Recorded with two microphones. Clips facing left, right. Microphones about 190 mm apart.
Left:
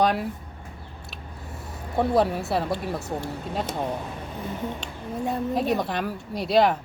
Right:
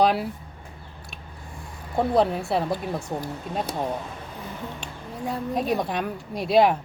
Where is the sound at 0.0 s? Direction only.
5° right (ahead or behind).